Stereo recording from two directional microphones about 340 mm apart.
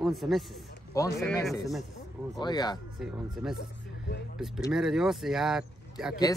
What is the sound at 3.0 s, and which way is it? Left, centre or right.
Speech, centre.